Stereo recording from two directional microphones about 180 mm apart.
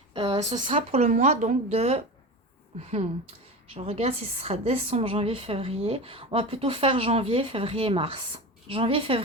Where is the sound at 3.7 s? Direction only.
35° right (ahead or behind).